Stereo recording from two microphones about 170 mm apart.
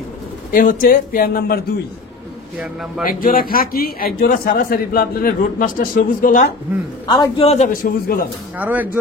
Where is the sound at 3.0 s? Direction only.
60° left (ahead or behind).